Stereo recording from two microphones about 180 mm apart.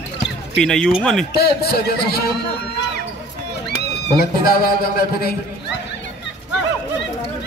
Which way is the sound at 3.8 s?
60° left (ahead or behind).